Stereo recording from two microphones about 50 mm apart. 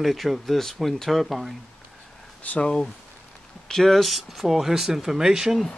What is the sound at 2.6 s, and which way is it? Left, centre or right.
Speech, centre.